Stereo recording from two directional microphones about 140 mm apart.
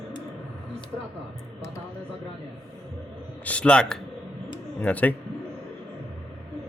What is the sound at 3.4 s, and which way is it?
A man's voice, 10° left (ahead or behind).